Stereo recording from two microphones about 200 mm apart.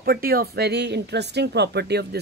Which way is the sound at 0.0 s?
50° right (ahead or behind).